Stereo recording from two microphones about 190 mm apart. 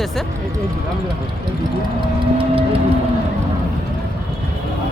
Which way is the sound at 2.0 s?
30° right (ahead or behind).